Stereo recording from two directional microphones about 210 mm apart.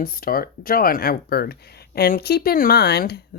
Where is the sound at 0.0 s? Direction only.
45° left (ahead or behind).